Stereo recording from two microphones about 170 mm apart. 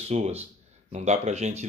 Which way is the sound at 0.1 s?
40° right (ahead or behind).